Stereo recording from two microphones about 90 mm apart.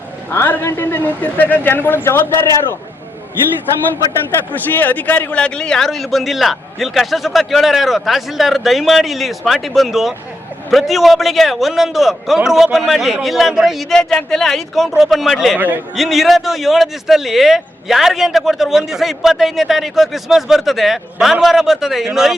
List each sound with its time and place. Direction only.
0.3 s a man's voice: 25° left (ahead or behind)
4.3 s a man's voice: 20° left (ahead or behind); by 15.5 s centre (ahead or behind)
15.5 s a man's voice: 20° right (ahead or behind)
16.0 s a man's voice: centre (ahead or behind)